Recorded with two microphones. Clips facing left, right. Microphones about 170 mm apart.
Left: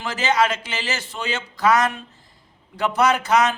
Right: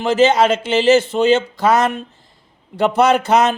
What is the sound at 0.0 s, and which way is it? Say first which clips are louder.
A man's voice: right 8 dB; 25° right (ahead or behind).